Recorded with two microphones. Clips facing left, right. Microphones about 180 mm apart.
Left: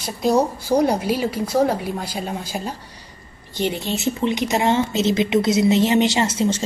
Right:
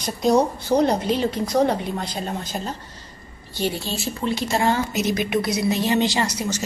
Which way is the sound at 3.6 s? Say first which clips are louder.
Left 3 dB; 20° left (ahead or behind).